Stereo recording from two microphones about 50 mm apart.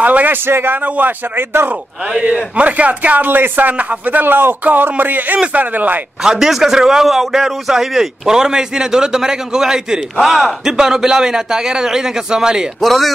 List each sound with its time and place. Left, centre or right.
0.0 s a man's voice: right
0.5 s a man's voice: right
2.2 s a man's voice: right
3.3 s a man's voice: right
6.2 s a man's voice: centre
12.8 s speech: centre